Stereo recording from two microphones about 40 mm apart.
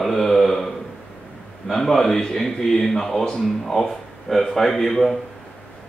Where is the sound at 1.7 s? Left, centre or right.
Centre.